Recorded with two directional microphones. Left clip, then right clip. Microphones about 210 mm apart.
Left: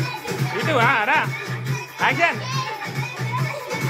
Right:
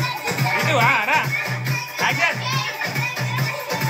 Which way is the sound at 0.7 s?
10° left (ahead or behind).